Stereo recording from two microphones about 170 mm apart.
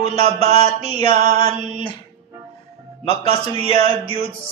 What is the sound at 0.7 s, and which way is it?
Speech, 30° left (ahead or behind).